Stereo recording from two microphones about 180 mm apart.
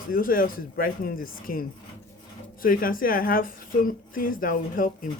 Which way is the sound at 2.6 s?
50° left (ahead or behind).